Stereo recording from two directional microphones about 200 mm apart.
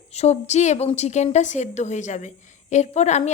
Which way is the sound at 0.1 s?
35° left (ahead or behind).